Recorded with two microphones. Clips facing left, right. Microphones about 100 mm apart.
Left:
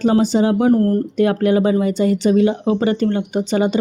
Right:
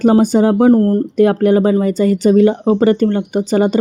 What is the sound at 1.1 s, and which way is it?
Speech, 45° right (ahead or behind).